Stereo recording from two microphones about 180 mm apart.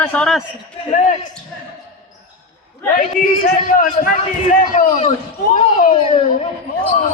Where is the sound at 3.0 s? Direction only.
45° left (ahead or behind).